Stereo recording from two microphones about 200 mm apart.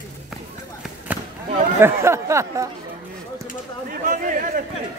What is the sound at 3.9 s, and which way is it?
Speech, 40° right (ahead or behind).